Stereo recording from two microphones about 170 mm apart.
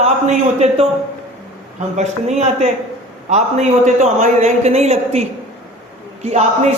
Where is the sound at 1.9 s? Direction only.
45° right (ahead or behind).